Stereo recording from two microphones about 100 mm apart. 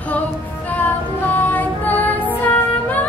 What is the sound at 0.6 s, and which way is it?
Music, 15° left (ahead or behind).